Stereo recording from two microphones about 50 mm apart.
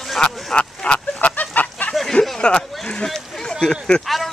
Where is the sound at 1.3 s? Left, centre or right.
Left.